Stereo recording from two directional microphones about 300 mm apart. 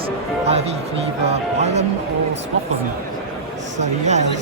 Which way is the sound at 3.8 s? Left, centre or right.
Right.